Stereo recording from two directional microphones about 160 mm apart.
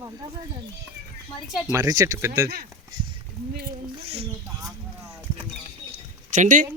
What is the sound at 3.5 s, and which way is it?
Speech, 65° right (ahead or behind).